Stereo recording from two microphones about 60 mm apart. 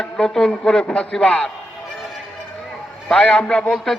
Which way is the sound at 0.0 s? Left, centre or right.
Centre.